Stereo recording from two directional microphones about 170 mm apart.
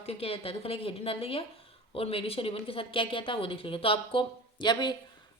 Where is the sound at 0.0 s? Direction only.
35° left (ahead or behind).